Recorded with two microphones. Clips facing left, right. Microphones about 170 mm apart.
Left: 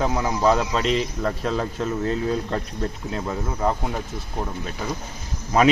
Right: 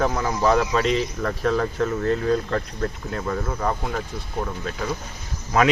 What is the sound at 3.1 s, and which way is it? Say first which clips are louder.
Speech: right 1 dB; 20° left (ahead or behind).